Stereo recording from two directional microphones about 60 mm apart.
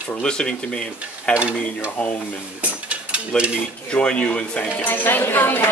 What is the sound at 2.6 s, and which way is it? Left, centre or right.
Mechanisms, centre.